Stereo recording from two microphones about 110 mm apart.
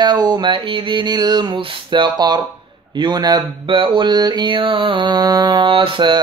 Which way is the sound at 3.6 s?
50° right (ahead or behind).